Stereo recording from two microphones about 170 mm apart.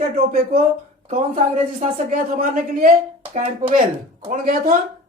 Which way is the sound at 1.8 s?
50° right (ahead or behind).